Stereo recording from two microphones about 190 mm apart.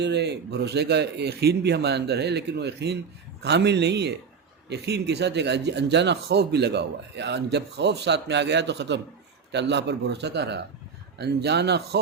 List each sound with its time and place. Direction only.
0.0 s speech: 60° right (ahead or behind)